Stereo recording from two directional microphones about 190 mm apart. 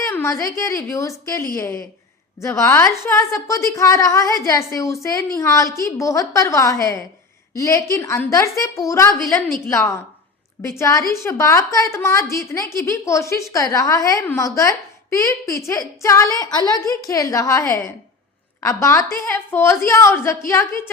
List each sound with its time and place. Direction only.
0.0 s a woman's voice: 15° left (ahead or behind)